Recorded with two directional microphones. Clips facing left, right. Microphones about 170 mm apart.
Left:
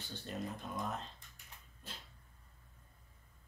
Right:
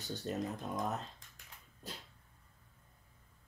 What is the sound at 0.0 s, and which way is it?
Speech, 40° right (ahead or behind).